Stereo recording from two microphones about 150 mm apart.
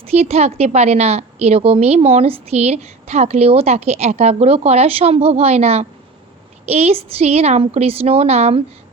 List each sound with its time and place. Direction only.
0.0 s a woman's voice: 45° right (ahead or behind)